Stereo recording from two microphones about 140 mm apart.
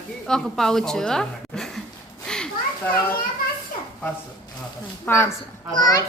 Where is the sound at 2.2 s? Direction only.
5° left (ahead or behind).